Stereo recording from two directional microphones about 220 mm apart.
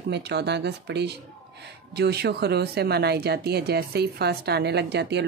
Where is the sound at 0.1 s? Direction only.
50° right (ahead or behind).